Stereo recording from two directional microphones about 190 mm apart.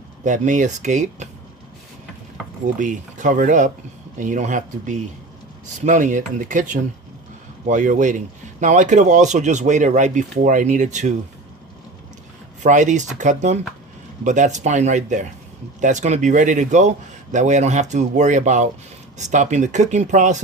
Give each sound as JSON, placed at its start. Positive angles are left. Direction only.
{"t": 0.3, "sound": "speech", "side_deg": -40}
{"t": 2.7, "sound": "speech", "side_deg": -40}
{"t": 7.7, "sound": "speech", "side_deg": -40}
{"t": 12.6, "sound": "speech", "side_deg": -40}